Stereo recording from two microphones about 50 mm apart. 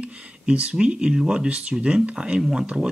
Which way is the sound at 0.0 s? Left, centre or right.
Right.